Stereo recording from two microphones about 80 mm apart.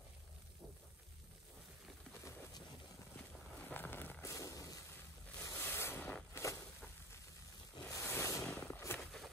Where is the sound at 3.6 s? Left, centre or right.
Left.